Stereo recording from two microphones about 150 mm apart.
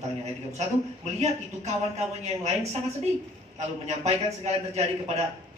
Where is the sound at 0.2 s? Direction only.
50° right (ahead or behind).